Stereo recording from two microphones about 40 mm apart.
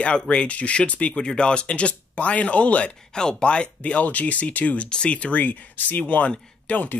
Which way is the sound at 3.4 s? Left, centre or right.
Left.